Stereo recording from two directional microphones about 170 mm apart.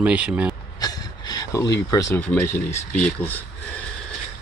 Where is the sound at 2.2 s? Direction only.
10° left (ahead or behind).